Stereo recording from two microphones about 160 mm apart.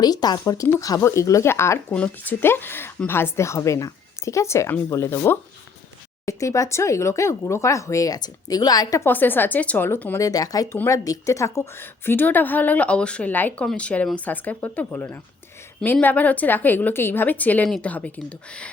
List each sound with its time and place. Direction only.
0.0 s speech: 25° left (ahead or behind); by 18.7 s 5° left (ahead or behind)